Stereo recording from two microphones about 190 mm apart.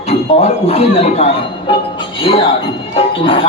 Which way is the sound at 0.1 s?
35° left (ahead or behind).